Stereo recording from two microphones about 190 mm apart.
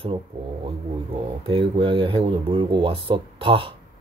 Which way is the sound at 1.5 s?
25° right (ahead or behind).